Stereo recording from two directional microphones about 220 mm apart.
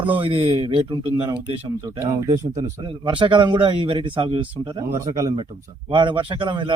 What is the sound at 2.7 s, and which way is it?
Speech, 20° right (ahead or behind).